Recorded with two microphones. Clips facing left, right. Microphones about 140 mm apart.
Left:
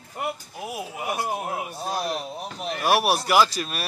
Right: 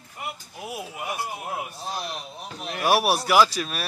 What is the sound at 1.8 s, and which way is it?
Speech, 45° left (ahead or behind).